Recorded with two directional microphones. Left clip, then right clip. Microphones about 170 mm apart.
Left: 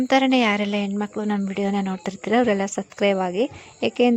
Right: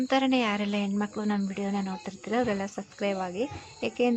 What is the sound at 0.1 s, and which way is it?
Speech, 45° left (ahead or behind).